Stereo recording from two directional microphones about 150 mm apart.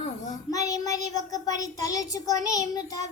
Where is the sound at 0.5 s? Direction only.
25° left (ahead or behind).